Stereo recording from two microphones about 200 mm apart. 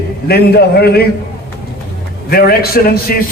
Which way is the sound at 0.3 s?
50° left (ahead or behind).